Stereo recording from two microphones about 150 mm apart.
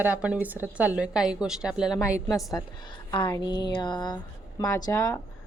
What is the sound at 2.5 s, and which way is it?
Speech, 30° left (ahead or behind).